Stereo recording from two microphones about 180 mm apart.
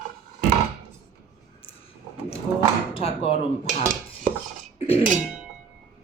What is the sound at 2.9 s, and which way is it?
Speech, 30° left (ahead or behind).